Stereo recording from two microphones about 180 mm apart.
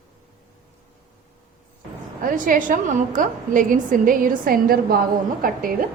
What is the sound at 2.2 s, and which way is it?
A woman's voice, 45° right (ahead or behind).